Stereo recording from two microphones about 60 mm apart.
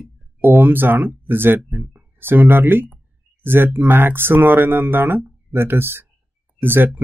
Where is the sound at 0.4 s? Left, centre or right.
Right.